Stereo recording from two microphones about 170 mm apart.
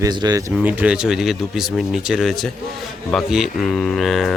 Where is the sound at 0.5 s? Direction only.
5° right (ahead or behind).